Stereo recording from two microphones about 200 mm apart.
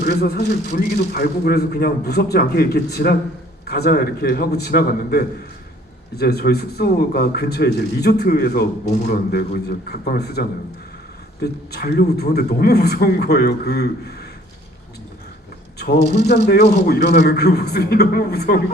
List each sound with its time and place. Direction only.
0.0 s speech: 50° left (ahead or behind)
11.7 s speech: 50° left (ahead or behind)
16.5 s speech: 50° left (ahead or behind)